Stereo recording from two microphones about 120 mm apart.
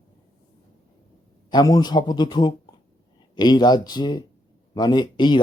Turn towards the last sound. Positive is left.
turn(degrees=35)  # may be behind; listen again after turning